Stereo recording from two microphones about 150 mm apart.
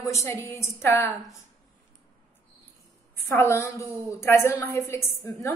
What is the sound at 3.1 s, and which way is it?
A woman's voice, 15° left (ahead or behind).